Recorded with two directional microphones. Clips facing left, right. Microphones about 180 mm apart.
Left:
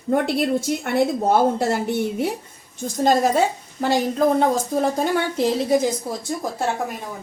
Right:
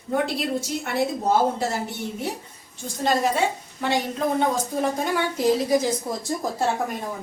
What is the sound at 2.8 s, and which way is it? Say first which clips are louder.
A woman's voice: left 5 dB; 40° left (ahead or behind).